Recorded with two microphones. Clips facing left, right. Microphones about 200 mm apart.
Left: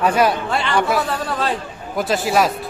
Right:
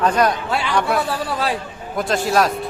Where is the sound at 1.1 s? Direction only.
5° right (ahead or behind).